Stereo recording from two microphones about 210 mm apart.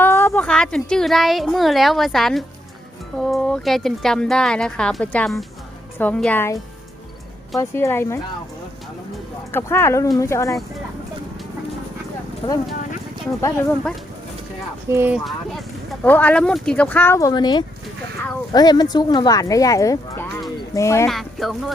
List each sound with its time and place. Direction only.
0.0 s a woman's voice: 10° left (ahead or behind)
7.6 s speech: 10° left (ahead or behind)
9.5 s speech: 10° left (ahead or behind)
12.4 s speech: 20° left (ahead or behind)
14.8 s speech: 10° right (ahead or behind)
16.0 s speech: 10° left (ahead or behind)
21.1 s speech: centre (ahead or behind)